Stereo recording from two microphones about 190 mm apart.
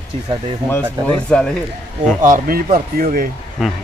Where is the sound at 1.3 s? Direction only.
5° left (ahead or behind).